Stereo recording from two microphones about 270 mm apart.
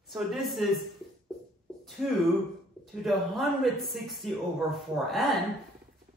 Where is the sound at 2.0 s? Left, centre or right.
Centre.